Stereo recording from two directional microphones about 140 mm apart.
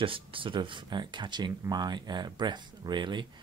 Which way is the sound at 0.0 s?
40° right (ahead or behind).